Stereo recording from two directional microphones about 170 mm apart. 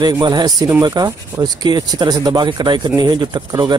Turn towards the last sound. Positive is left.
turn(degrees=-25)  # may be behind; listen again after turning